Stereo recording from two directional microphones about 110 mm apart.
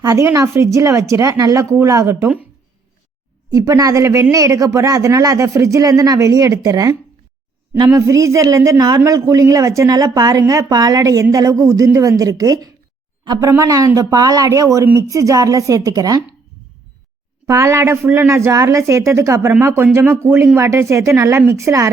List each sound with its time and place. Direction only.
0.0 s speech: 30° right (ahead or behind)
3.5 s speech: 35° right (ahead or behind)
17.4 s speech: 30° right (ahead or behind)